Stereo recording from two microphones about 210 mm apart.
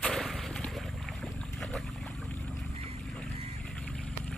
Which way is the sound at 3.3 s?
30° right (ahead or behind).